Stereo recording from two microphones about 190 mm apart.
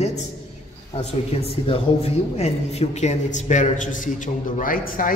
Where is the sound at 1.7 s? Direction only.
35° left (ahead or behind).